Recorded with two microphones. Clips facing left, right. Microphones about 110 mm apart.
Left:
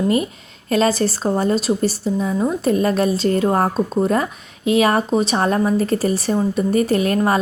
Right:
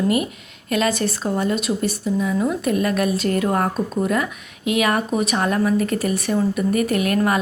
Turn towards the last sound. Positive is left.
turn(degrees=30)  # may be behind; listen again after turning